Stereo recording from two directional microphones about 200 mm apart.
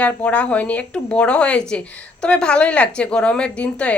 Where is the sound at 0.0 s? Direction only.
5° left (ahead or behind).